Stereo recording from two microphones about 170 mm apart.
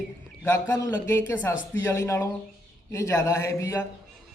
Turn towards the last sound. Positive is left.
turn(degrees=15)  # may be behind; listen again after turning